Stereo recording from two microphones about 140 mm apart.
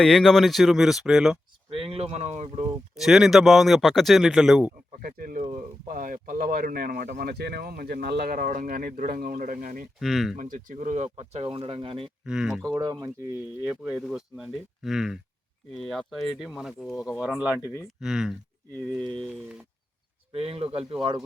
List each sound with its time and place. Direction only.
0.0 s speech: 5° left (ahead or behind)
1.7 s speech: 45° right (ahead or behind)
3.0 s speech: centre (ahead or behind)
4.9 s speech: 90° right
5.4 s a sound: 40° right (ahead or behind)
5.9 s speech: 75° right (ahead or behind)
10.0 s speech: centre (ahead or behind)
10.3 s speech: 70° right (ahead or behind); by 12.1 s 40° right (ahead or behind)
12.2 s speech: 5° right (ahead or behind)
13.7 s speech: 5° right (ahead or behind)
20.3 s speech: 45° right (ahead or behind)